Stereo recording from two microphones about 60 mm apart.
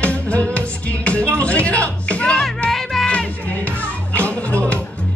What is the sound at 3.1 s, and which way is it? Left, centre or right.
Music, left.